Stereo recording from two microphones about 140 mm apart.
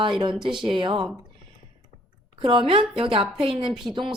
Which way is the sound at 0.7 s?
35° right (ahead or behind).